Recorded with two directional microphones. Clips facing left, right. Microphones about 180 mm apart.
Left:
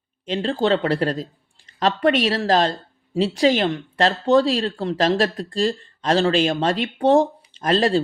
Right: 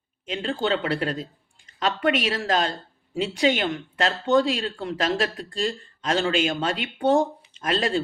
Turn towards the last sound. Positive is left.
turn(degrees=35)  # may be behind; listen again after turning